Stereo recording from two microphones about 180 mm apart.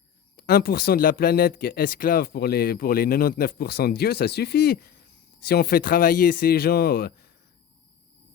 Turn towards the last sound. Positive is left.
turn(degrees=60)  # may be behind; listen again after turning